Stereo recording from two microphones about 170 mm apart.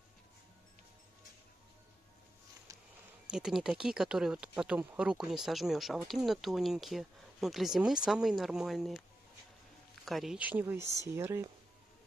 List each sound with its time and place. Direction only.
3.3 s speech: 5° right (ahead or behind)
10.0 s speech: centre (ahead or behind)